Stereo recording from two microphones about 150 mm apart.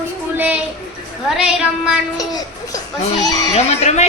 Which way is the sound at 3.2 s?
25° left (ahead or behind).